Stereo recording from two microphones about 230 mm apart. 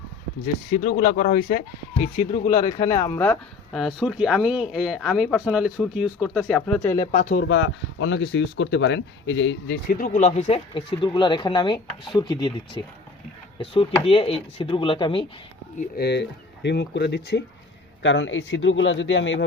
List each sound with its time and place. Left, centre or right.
0.7 s speech: left
2.5 s a man's voice: centre
3.2 s speech: centre
7.4 s speech: left
9.9 s speech: left
16.0 s speech: left